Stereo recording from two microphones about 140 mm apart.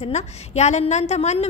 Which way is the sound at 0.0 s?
55° left (ahead or behind).